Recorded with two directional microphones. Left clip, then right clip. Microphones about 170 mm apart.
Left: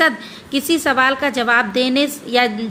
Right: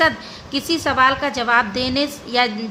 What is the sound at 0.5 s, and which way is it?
A woman's voice, 10° left (ahead or behind).